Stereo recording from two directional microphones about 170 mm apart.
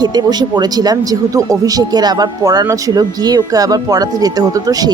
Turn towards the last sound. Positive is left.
turn(degrees=-20)  # may be behind; listen again after turning